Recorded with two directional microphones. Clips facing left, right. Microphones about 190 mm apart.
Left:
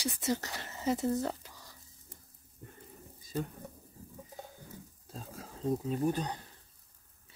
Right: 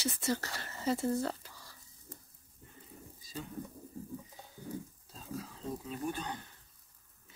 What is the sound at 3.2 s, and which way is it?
Pigeon, 55° left (ahead or behind).